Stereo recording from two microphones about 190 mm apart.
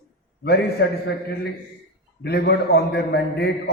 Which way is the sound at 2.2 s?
60° left (ahead or behind).